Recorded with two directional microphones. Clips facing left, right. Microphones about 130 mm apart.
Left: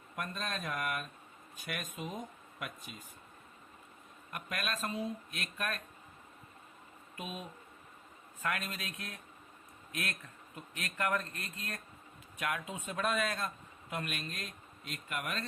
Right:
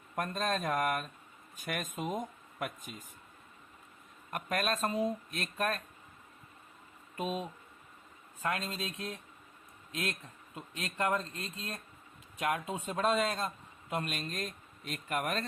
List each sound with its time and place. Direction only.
0.2 s speech: 40° right (ahead or behind)
4.3 s speech: 40° right (ahead or behind)
7.2 s speech: 35° right (ahead or behind)